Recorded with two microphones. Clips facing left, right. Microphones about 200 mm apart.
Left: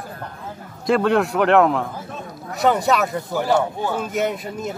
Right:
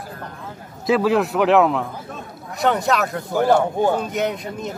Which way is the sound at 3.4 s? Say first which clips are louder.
Right 5 dB; 45° right (ahead or behind).